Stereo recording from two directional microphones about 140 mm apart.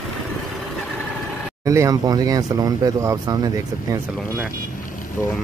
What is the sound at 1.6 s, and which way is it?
Speech, 25° right (ahead or behind).